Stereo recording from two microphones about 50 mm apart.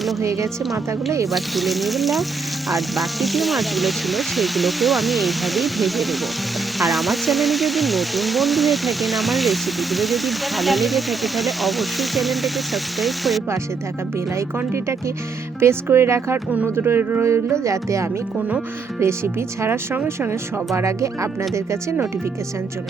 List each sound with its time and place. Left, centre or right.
0.2 s speech: right
0.6 s speech: centre
14.6 s speech: right
16.7 s speech: right
17.2 s music: right
18.9 s speech: right
20.7 s speech: right
21.5 s music: right